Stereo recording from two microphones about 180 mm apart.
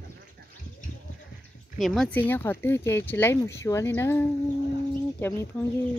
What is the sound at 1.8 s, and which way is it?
Speech, centre (ahead or behind).